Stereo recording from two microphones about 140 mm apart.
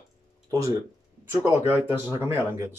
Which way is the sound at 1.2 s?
15° right (ahead or behind).